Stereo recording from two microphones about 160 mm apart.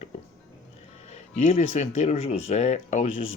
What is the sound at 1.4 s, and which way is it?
Speech, 45° left (ahead or behind).